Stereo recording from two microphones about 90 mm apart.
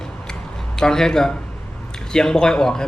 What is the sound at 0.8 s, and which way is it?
A man's voice, 5° left (ahead or behind).